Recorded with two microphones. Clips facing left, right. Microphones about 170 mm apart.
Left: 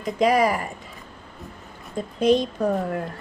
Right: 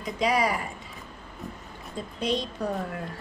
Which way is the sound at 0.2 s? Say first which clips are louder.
Left 6 dB; 50° left (ahead or behind).